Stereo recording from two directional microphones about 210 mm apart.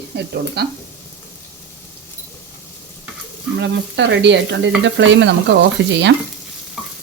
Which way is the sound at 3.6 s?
55° right (ahead or behind).